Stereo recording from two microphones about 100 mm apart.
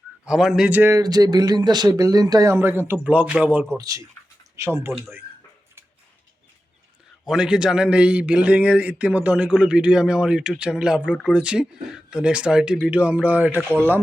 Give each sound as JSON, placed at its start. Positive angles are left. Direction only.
{"t": 0.3, "sound": "a man's voice", "side_deg": -5}
{"t": 0.7, "sound": "speech", "side_deg": -20}
{"t": 0.9, "sound": "speech", "side_deg": -40}
{"t": 2.6, "sound": "a man's voice", "side_deg": -20}
{"t": 3.8, "sound": "speech", "side_deg": -35}
{"t": 7.3, "sound": "a man's voice", "side_deg": -5}